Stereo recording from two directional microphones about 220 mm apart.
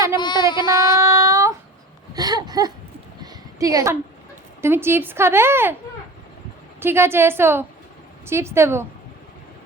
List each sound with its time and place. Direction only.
0.2 s child singing: 20° left (ahead or behind)
0.9 s child singing: 15° right (ahead or behind)
2.1 s a woman's voice: 20° right (ahead or behind)
6.7 s a woman's voice: 10° right (ahead or behind)